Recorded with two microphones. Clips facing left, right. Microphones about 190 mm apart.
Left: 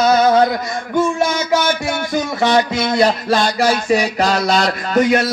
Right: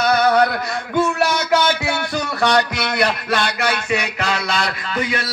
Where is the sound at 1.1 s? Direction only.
65° right (ahead or behind).